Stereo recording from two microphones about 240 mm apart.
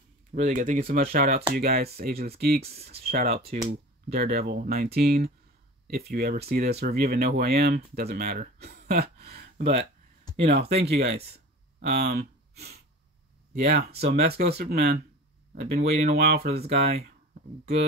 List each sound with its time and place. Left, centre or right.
0.3 s speech: right
10.3 s a sound: centre
10.8 s speech: right